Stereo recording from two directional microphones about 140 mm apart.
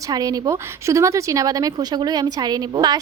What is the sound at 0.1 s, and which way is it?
A woman's voice, 25° right (ahead or behind).